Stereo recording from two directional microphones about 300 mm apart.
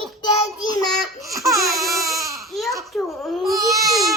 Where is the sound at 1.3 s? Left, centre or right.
Centre.